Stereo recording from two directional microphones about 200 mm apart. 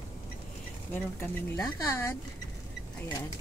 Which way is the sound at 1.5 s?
15° left (ahead or behind).